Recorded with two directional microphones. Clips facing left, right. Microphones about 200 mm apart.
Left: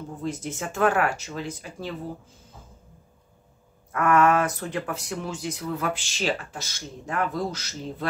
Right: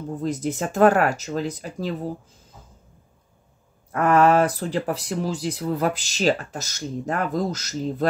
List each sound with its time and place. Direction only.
0.2 s speech: 40° right (ahead or behind)
3.9 s speech: 35° right (ahead or behind)